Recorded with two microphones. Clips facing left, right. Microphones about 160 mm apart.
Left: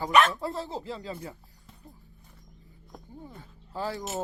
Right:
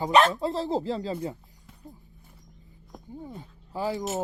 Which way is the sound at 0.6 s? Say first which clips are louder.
Right 8 dB; 40° right (ahead or behind).